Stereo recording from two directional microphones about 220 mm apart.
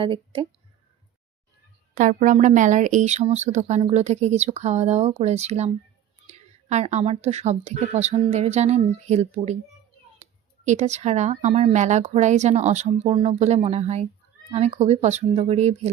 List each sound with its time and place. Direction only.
0.0 s speech: 25° right (ahead or behind)
2.0 s speech: 35° right (ahead or behind)